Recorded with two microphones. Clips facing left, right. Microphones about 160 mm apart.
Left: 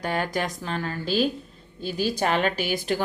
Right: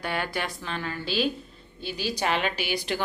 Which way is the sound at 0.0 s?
40° left (ahead or behind).